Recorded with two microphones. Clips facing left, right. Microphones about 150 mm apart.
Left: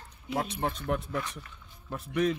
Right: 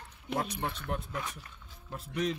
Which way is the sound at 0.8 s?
75° left (ahead or behind).